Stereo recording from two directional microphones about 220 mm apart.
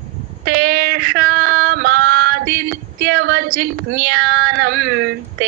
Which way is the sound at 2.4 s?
40° right (ahead or behind).